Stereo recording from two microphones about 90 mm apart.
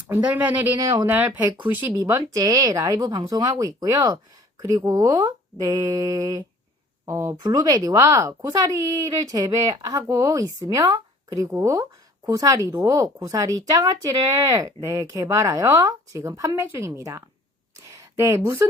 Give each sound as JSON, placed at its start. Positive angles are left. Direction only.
{"t": 0.1, "sound": "speech", "side_deg": -20}
{"t": 2.0, "sound": "speech", "side_deg": -40}
{"t": 7.4, "sound": "speech", "side_deg": -50}